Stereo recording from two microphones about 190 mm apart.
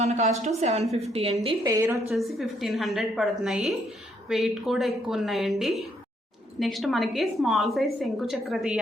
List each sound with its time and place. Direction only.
0.0 s a woman's voice: 35° right (ahead or behind)
1.6 s a woman's voice: 15° right (ahead or behind)
2.1 s a woman's voice: centre (ahead or behind)